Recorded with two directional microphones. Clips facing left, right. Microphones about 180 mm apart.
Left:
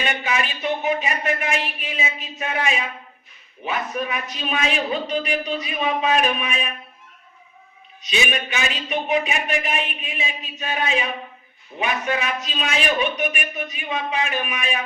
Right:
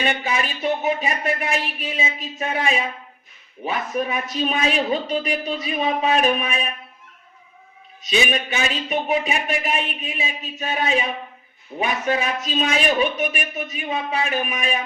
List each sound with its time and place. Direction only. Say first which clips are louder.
0.0 s a man's voice: right 1 dB; 35° right (ahead or behind)
8.0 s a man's voice: right 3 dB; 40° right (ahead or behind)